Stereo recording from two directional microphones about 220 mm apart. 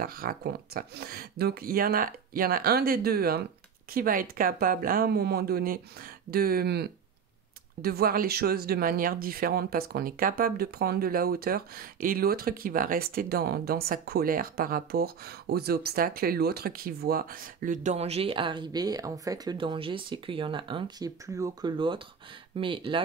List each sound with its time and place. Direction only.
0.0 s speech: 40° right (ahead or behind); by 23.0 s 20° right (ahead or behind)